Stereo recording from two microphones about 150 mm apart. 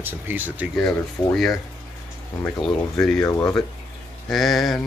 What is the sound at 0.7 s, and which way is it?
Speech, 5° left (ahead or behind).